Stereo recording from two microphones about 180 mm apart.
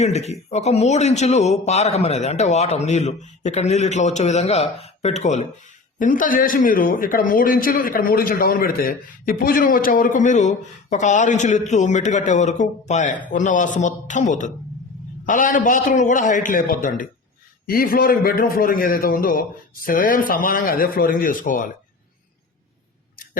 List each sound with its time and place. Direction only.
0.0 s a man's voice: 35° left (ahead or behind)
6.0 s a man's voice: 50° left (ahead or behind)